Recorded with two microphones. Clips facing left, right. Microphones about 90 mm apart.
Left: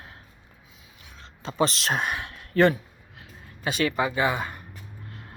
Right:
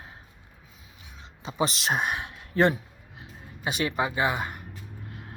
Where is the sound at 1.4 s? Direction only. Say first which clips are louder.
Left 2 dB; 15° right (ahead or behind).